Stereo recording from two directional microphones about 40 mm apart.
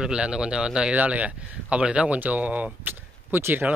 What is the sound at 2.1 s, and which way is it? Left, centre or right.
Speech, right.